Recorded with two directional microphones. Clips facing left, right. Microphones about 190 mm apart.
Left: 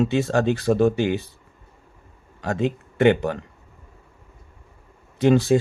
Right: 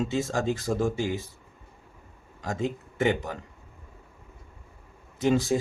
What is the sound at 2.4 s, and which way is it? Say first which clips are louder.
Speech: left 6 dB; 65° left (ahead or behind).